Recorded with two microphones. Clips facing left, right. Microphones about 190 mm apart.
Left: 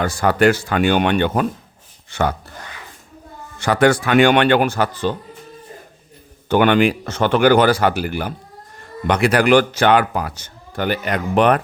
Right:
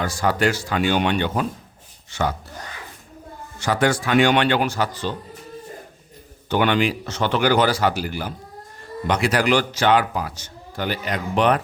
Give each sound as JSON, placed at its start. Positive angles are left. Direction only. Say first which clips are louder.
{"t": 0.0, "sound": "a man's voice", "louder": "left 5 dB", "side_deg": 55}
{"t": 3.6, "sound": "a man's voice", "louder": "left 5 dB", "side_deg": 60}
{"t": 6.5, "sound": "a man's voice", "louder": "left 5 dB", "side_deg": 55}